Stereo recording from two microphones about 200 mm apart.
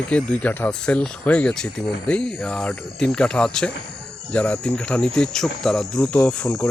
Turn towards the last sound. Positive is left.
turn(degrees=5)  # may be behind; listen again after turning